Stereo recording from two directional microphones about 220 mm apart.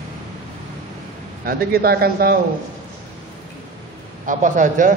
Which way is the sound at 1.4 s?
45° right (ahead or behind).